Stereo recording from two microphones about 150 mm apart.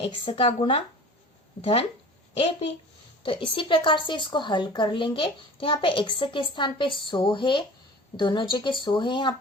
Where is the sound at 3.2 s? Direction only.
35° left (ahead or behind).